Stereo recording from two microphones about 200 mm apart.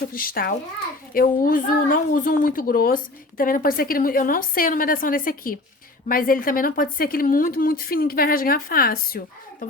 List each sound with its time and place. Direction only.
0.1 s a woman's voice: 45° left (ahead or behind)